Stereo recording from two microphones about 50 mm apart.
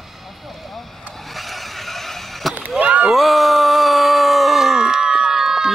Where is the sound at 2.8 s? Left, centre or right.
Right.